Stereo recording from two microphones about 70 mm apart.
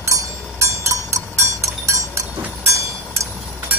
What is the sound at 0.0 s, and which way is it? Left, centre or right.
Cowbell, right.